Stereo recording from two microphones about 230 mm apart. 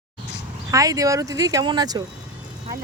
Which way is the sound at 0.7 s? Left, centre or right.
Centre.